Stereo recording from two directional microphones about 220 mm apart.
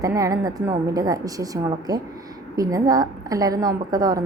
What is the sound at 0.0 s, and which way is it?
A woman's voice, 15° right (ahead or behind).